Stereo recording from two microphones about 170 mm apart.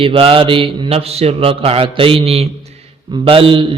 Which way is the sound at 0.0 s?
35° right (ahead or behind).